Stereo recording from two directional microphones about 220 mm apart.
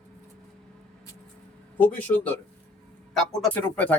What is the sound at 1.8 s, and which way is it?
Speech, 5° left (ahead or behind).